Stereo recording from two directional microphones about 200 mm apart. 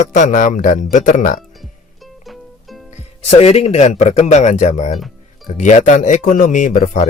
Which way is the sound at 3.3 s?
30° left (ahead or behind).